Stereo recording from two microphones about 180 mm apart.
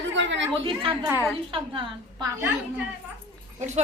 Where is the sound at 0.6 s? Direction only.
30° right (ahead or behind).